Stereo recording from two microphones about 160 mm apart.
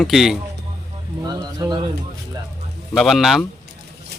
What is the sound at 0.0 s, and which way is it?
Speech, centre (ahead or behind).